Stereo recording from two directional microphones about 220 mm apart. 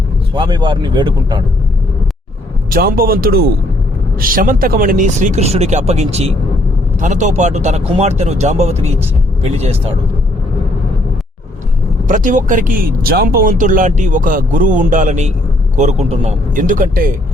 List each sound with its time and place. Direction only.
0.3 s speech: 20° right (ahead or behind)
2.6 s speech: 40° right (ahead or behind)
12.0 s speech: 35° right (ahead or behind)